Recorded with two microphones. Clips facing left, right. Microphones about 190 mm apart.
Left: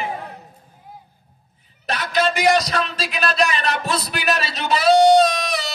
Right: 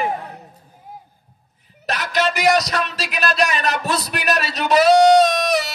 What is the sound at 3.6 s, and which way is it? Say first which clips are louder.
Speech: right 1 dB; 40° right (ahead or behind).